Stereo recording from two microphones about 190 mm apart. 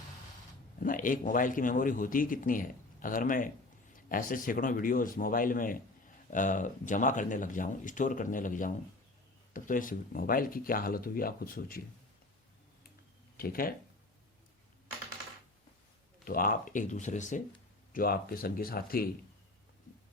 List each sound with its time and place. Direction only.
0.8 s a man's voice: 45° left (ahead or behind)
13.3 s speech: 50° left (ahead or behind)
16.2 s a man's voice: 45° left (ahead or behind)